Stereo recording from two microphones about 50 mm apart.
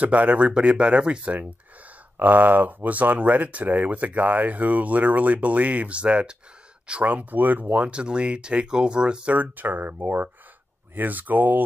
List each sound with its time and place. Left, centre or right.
0.0 s speech: right
2.1 s speech: right